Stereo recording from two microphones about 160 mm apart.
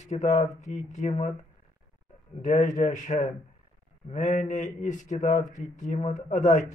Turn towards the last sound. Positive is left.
turn(degrees=50)  # may be behind; listen again after turning